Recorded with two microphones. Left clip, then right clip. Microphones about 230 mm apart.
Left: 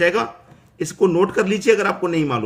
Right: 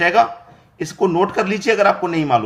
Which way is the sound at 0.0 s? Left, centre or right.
Centre.